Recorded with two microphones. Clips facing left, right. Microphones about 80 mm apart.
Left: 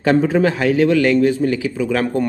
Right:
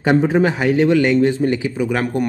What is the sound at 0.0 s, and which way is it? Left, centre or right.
A man's voice, centre.